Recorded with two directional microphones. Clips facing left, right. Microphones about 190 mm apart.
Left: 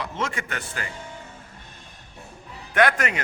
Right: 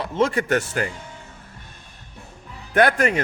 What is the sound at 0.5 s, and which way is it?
Speech, 45° right (ahead or behind).